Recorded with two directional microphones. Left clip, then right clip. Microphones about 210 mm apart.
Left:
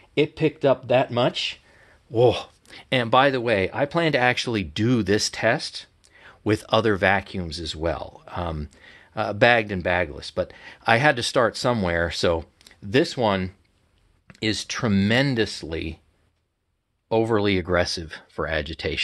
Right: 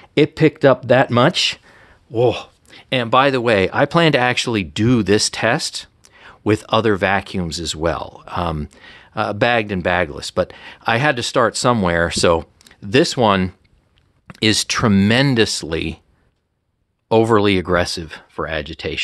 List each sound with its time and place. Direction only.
0.0 s speech: 45° right (ahead or behind)
2.1 s speech: 5° right (ahead or behind); by 16.0 s 30° right (ahead or behind)
17.1 s speech: 30° right (ahead or behind); by 18.9 s 5° right (ahead or behind)